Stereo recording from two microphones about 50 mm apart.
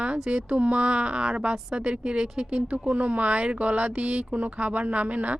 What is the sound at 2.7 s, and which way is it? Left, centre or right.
Speech, right.